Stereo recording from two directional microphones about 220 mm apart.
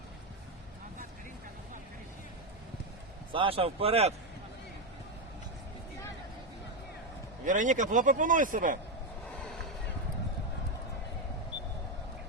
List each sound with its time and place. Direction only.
3.3 s speech: 25° right (ahead or behind)
7.4 s speech: 35° right (ahead or behind)